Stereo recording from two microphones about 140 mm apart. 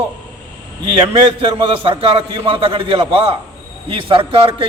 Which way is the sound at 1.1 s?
40° right (ahead or behind).